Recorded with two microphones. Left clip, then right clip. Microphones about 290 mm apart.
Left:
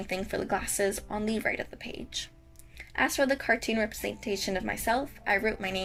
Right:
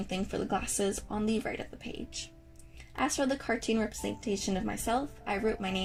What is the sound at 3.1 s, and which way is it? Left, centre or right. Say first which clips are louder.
Speech: left 5 dB; left.